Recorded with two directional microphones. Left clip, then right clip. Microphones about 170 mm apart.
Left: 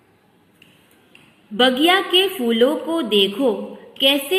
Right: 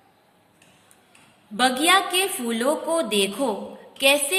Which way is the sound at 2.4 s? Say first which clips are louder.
Left 9 dB; 40° right (ahead or behind).